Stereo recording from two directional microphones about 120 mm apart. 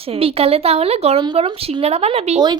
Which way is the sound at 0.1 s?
55° right (ahead or behind).